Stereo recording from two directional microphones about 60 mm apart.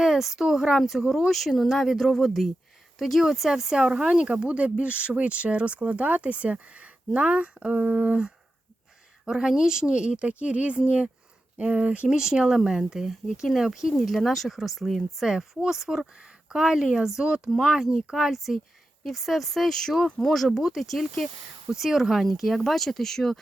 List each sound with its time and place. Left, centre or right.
0.0 s speech: centre; by 8.3 s right
9.2 s speech: centre
15.2 s speech: centre